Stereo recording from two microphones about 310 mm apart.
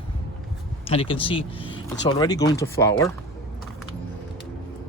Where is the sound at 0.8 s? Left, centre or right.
Centre.